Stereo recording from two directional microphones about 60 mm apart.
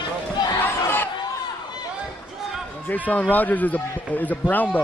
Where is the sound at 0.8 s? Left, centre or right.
Left.